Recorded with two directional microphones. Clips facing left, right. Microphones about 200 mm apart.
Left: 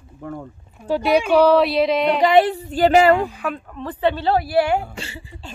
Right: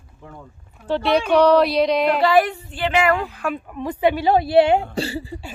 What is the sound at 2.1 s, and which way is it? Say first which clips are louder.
Speech: left 3 dB; 20° left (ahead or behind).